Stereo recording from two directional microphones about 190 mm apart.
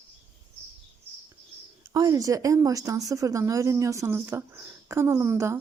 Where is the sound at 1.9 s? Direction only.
20° right (ahead or behind).